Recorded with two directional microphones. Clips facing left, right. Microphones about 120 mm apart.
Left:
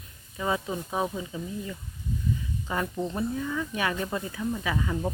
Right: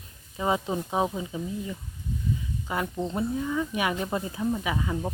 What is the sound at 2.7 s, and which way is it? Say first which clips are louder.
Speech: right 1 dB; 10° right (ahead or behind).